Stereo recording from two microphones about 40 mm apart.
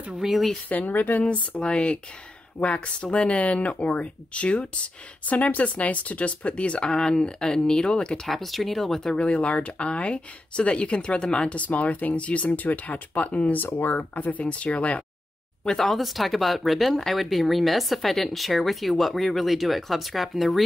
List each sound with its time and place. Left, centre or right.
0.2 s speech: centre
0.7 s speech: left
1.6 s speech: left
5.2 s speech: left
8.3 s speech: centre
9.2 s speech: left
11.3 s speech: left
13.6 s speech: left
13.9 s speech: left
15.8 s speech: centre